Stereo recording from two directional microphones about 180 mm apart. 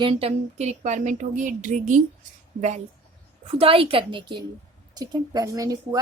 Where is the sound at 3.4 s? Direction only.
30° right (ahead or behind).